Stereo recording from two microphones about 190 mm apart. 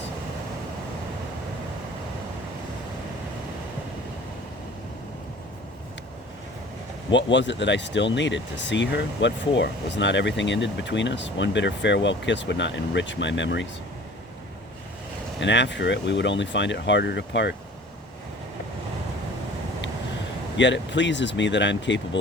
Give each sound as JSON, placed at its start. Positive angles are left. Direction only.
{"t": 7.1, "sound": "speech", "side_deg": 70}
{"t": 15.4, "sound": "speech", "side_deg": 70}
{"t": 20.6, "sound": "speech", "side_deg": 70}